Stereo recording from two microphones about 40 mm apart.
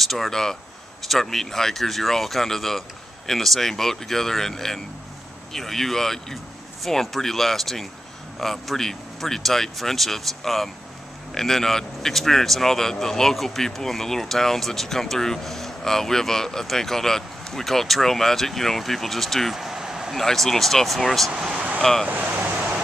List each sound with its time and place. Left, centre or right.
0.0 s speech: centre
19.5 s vehicle: centre
20.2 s speech: centre
21.5 s vehicle: right